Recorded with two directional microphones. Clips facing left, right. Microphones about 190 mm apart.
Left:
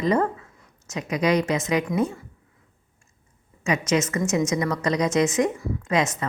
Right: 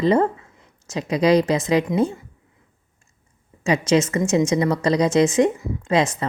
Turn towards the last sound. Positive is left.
turn(degrees=-30)  # may be behind; listen again after turning